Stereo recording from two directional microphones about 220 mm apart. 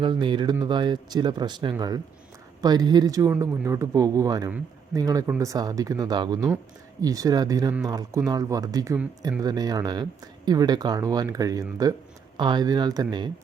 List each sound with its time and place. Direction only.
0.0 s speech: 20° right (ahead or behind)